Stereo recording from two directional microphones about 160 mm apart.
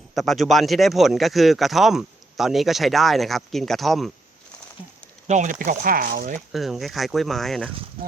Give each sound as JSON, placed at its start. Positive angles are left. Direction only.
{"t": 0.1, "sound": "speech", "side_deg": 0}
{"t": 5.3, "sound": "speech", "side_deg": -55}
{"t": 6.5, "sound": "speech", "side_deg": 0}